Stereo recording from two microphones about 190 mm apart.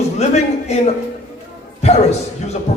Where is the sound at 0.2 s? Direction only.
35° left (ahead or behind).